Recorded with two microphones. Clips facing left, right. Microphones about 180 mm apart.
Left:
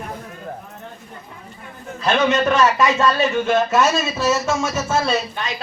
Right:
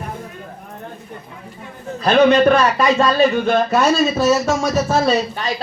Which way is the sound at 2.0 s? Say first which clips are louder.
Right 6 dB; 35° right (ahead or behind).